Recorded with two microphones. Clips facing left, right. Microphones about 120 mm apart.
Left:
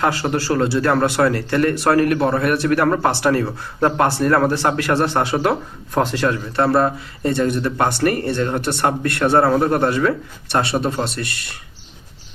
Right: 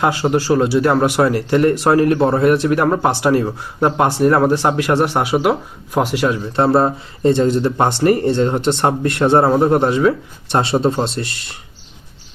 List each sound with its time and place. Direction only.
0.0 s speech: 20° right (ahead or behind)